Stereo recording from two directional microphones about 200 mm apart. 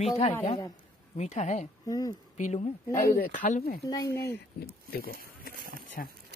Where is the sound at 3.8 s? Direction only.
15° left (ahead or behind).